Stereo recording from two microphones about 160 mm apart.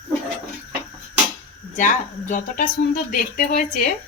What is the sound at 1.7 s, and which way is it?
A woman's voice, 55° left (ahead or behind).